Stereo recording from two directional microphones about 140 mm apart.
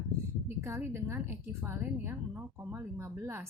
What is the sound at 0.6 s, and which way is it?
Speech, 20° right (ahead or behind).